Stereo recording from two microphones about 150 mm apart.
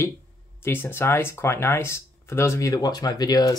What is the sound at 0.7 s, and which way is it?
Speech, 15° left (ahead or behind).